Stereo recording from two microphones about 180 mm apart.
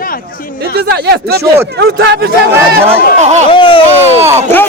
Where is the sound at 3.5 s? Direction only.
30° left (ahead or behind).